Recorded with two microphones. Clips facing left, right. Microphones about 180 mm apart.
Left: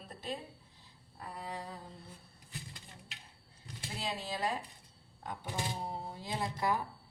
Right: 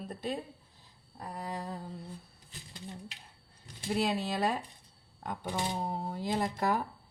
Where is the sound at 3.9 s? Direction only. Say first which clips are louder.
Right 8 dB; 65° right (ahead or behind).